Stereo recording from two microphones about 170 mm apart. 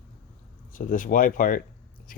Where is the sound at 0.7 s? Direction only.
50° left (ahead or behind).